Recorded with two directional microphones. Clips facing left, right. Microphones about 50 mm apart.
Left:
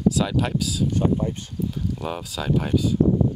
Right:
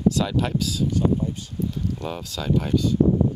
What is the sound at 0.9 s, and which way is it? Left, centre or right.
Speech, left.